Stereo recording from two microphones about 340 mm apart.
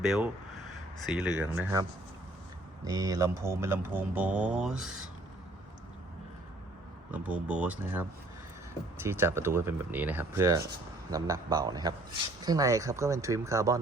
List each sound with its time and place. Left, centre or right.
0.0 s speech: centre
7.1 s speech: centre
9.0 s speech: centre